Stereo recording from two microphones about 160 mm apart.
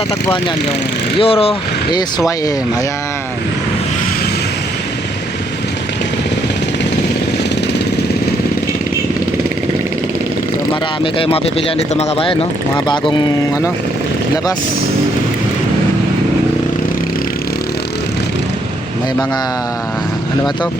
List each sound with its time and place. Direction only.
1.2 s speech: 35° left (ahead or behind)
11.0 s speech: 35° left (ahead or behind)